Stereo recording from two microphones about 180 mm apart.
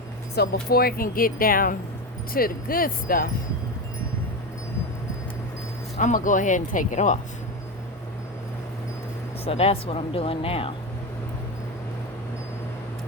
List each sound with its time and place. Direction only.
0.3 s speech: 60° left (ahead or behind)
6.0 s speech: 45° left (ahead or behind)
9.4 s speech: 35° left (ahead or behind)